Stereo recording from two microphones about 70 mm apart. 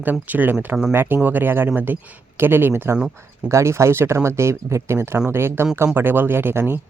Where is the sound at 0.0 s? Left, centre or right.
Right.